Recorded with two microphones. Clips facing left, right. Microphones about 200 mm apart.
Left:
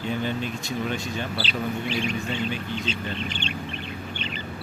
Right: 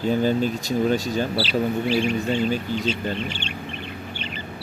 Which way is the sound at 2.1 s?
45° right (ahead or behind).